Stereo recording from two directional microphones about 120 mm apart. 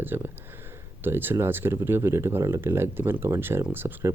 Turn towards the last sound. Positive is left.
turn(degrees=-20)  # may be behind; listen again after turning